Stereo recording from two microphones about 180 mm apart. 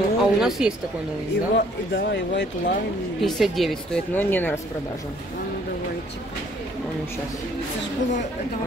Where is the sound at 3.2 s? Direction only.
Centre (ahead or behind).